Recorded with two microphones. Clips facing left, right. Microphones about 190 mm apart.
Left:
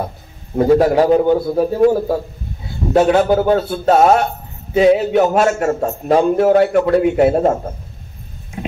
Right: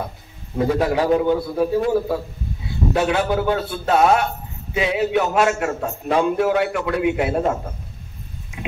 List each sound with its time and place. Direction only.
0.6 s a man's voice: 40° left (ahead or behind)